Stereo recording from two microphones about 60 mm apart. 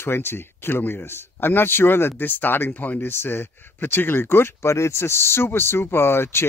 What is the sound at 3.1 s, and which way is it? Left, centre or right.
Speech, left.